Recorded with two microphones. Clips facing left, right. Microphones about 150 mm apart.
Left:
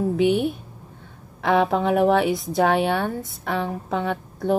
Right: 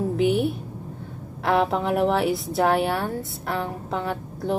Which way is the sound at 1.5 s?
Centre (ahead or behind).